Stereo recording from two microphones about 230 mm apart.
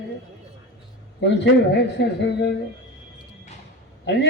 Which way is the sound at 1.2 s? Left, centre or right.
Left.